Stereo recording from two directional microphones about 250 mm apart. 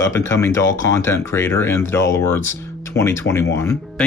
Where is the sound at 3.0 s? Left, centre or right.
Centre.